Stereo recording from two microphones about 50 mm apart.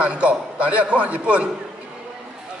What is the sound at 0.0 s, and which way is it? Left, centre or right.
A man's voice, right.